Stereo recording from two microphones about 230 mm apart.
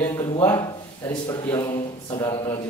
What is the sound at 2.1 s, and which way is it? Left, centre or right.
Speech, centre.